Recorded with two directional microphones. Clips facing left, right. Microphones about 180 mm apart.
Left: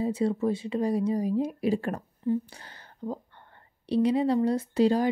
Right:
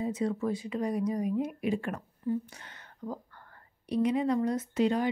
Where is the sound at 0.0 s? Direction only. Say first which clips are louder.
Left 4 dB; 30° left (ahead or behind).